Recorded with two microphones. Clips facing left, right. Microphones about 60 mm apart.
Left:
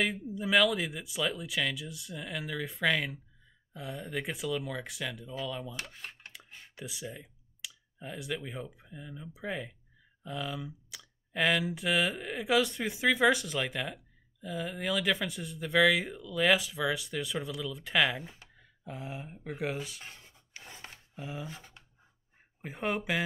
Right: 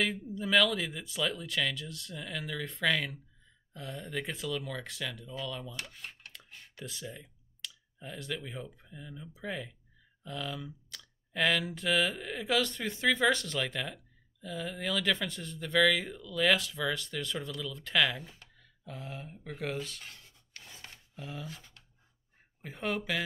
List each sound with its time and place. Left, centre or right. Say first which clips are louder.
0.0 s speech: left 1 dB; centre
20.7 s rub: left 2 dB; left
22.6 s speech: left 2 dB; centre